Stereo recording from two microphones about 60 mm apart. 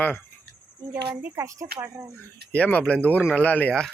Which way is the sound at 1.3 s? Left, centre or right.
Right.